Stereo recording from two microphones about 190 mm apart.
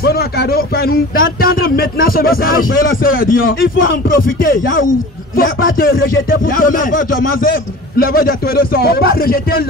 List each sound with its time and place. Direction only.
0.0 s speech: 55° left (ahead or behind)